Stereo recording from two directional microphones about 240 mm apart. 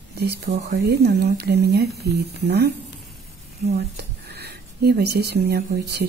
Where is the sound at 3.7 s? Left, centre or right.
Right.